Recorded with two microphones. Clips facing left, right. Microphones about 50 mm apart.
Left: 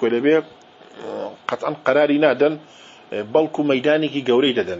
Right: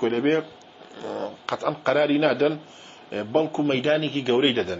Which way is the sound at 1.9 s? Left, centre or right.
Left.